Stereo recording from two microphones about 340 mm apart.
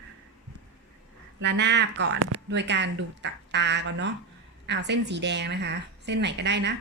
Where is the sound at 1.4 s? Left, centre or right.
Right.